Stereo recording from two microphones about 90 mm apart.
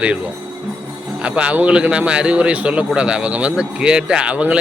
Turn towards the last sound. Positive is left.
turn(degrees=-15)  # may be behind; listen again after turning